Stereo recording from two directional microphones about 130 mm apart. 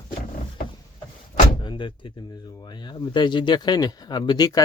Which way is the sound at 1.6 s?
40° left (ahead or behind).